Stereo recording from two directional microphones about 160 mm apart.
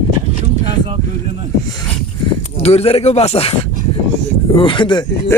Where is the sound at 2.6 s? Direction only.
40° left (ahead or behind).